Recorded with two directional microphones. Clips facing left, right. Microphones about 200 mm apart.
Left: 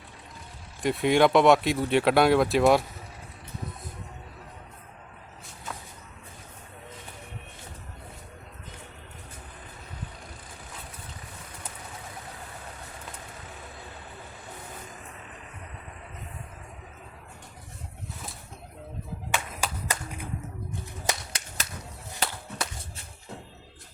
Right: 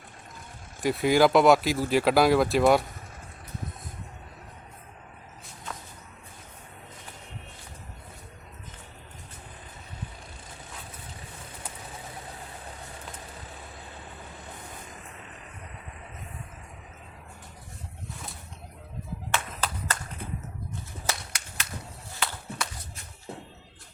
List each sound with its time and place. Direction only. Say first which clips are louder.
0.8 s speech: even; centre (ahead or behind)
19.3 s clapping: even; 10° left (ahead or behind)
21.1 s whip: left 2 dB; 15° left (ahead or behind)
22.1 s a sound: left 1 dB; 20° left (ahead or behind)